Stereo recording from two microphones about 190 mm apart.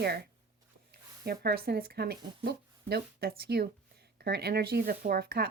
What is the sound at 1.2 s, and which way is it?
Speech, 55° right (ahead or behind).